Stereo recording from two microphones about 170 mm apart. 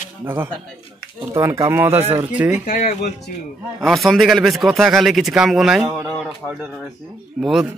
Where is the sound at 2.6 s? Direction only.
45° left (ahead or behind).